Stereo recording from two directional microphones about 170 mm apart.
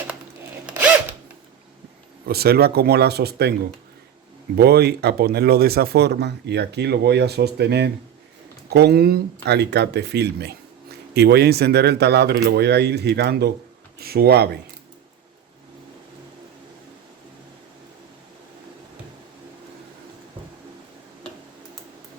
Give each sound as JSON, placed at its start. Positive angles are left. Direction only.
{"t": 0.6, "sound": "zipper", "side_deg": -5}
{"t": 2.2, "sound": "speech", "side_deg": -65}
{"t": 4.5, "sound": "speech", "side_deg": -70}